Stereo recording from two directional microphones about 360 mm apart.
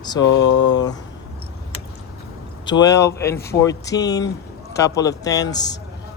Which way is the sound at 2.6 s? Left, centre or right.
Centre.